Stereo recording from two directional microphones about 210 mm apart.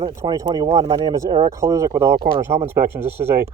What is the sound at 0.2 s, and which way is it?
Speech, 15° right (ahead or behind).